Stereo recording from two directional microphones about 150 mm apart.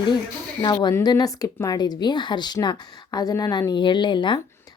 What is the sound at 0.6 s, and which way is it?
A woman's voice, 30° left (ahead or behind).